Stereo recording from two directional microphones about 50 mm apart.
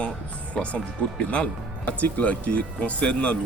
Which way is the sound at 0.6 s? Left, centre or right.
Centre.